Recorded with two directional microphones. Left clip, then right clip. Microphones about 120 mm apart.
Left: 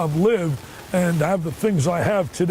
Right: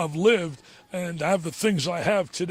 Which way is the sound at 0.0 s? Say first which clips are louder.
Left 1 dB; 20° right (ahead or behind).